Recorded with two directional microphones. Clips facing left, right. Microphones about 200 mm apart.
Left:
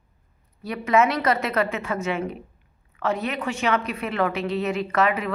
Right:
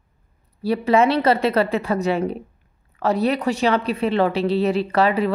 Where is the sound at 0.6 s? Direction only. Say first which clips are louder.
Right 4 dB; 30° right (ahead or behind).